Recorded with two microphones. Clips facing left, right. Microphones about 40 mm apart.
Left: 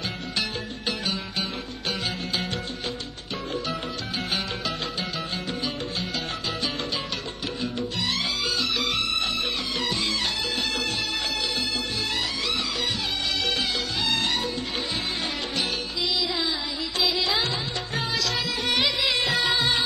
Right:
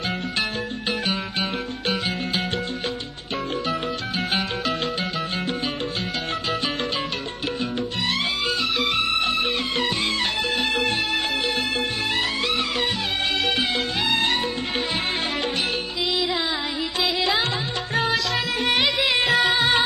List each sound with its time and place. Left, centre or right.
4.3 s music: right
10.6 s music: right
17.2 s music: right
18.0 s music: right